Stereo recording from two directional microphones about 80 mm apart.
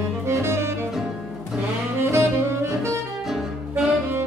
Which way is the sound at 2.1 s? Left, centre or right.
Right.